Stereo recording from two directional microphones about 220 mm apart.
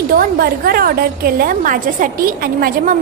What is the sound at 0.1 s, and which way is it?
A woman's voice, 40° right (ahead or behind).